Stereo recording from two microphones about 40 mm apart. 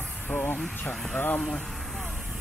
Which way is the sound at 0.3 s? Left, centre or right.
Left.